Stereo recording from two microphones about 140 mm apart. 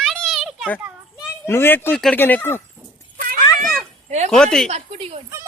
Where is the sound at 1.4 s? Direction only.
15° left (ahead or behind).